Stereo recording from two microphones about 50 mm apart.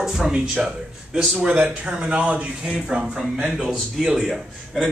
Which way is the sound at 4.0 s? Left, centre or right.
Centre.